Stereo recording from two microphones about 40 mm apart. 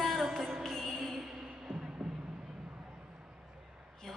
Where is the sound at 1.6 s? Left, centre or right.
Centre.